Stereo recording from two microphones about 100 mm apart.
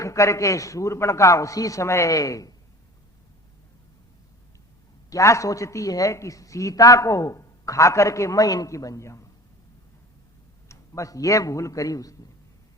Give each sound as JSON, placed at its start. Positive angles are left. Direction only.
{"t": 0.0, "sound": "speech", "side_deg": 30}
{"t": 5.0, "sound": "speech", "side_deg": 30}
{"t": 10.7, "sound": "speech", "side_deg": 30}